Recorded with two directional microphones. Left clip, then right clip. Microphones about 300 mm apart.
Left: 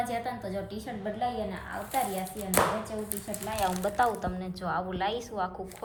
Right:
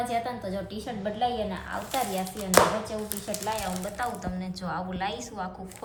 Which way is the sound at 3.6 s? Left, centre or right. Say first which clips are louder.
Left 5 dB; centre.